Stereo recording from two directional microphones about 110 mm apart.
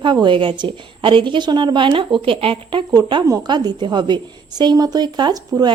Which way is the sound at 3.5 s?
40° right (ahead or behind).